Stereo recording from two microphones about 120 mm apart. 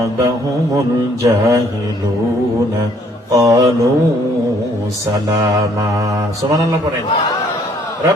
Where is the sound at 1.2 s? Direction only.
25° right (ahead or behind).